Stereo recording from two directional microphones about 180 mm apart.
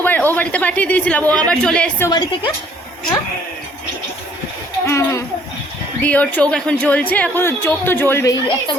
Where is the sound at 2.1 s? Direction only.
25° left (ahead or behind).